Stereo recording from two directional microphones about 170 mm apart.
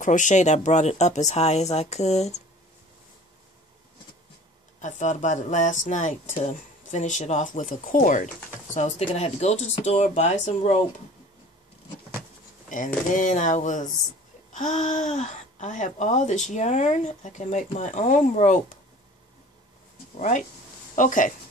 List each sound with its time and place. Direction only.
0.0 s speech: 45° left (ahead or behind)
4.8 s speech: 45° left (ahead or behind)
12.6 s a sound: 50° left (ahead or behind)
13.1 s speech: 50° left (ahead or behind)
20.2 s speech: 45° left (ahead or behind)